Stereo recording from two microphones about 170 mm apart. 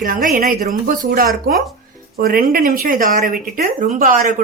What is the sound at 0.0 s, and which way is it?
Speech, 55° right (ahead or behind).